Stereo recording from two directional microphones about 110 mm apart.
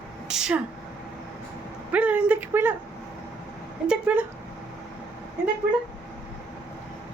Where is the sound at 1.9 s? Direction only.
15° right (ahead or behind).